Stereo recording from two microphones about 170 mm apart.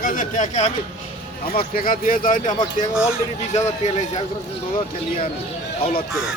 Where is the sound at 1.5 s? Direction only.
60° left (ahead or behind).